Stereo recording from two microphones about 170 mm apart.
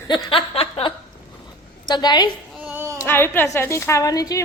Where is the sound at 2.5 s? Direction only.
Centre (ahead or behind).